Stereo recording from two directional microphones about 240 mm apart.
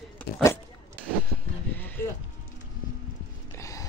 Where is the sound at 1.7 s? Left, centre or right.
Centre.